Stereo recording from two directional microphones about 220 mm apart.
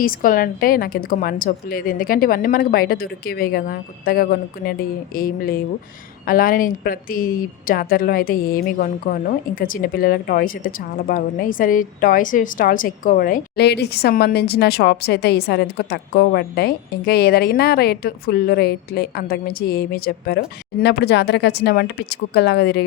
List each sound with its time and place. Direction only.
0.0 s a woman's voice: 40° left (ahead or behind)